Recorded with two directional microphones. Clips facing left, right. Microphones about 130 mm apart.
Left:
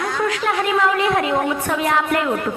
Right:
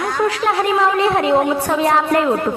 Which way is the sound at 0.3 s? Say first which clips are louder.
Right 3 dB; 30° right (ahead or behind).